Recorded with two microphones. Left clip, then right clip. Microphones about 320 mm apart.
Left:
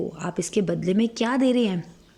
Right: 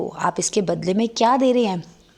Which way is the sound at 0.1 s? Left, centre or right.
Centre.